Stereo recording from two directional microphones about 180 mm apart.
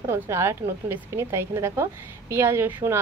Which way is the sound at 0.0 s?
15° right (ahead or behind).